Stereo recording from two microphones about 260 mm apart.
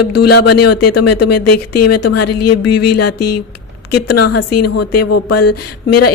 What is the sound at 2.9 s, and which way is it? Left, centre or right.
Speech, left.